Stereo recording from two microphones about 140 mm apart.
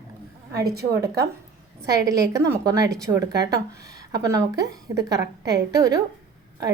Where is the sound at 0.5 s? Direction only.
25° right (ahead or behind).